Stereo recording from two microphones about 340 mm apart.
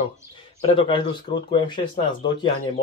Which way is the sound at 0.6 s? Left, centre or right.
Centre.